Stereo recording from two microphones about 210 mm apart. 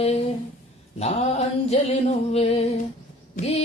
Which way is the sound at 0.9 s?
30° left (ahead or behind).